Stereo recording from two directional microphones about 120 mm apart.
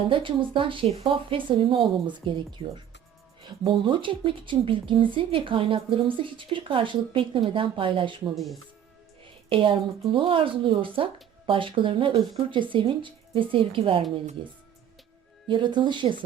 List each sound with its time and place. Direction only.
0.1 s a woman's voice: 45° right (ahead or behind)
9.2 s a woman's voice: 45° right (ahead or behind)